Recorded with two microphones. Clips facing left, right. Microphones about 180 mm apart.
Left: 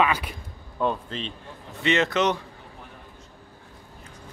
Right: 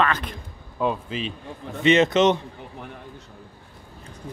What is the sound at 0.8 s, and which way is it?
Speech, 5° right (ahead or behind).